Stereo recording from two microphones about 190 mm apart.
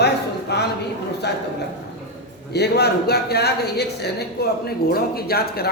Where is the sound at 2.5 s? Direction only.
60° left (ahead or behind).